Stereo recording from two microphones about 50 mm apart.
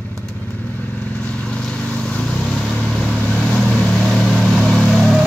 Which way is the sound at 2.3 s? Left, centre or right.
Centre.